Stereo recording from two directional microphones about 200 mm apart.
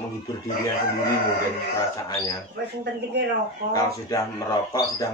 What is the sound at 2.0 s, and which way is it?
Speech, 20° left (ahead or behind).